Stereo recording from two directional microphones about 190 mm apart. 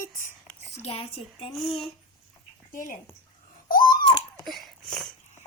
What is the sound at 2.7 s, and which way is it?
Speech, 45° left (ahead or behind).